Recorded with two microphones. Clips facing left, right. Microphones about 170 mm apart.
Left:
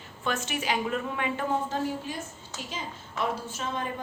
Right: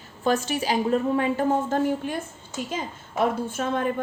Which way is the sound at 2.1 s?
50° right (ahead or behind).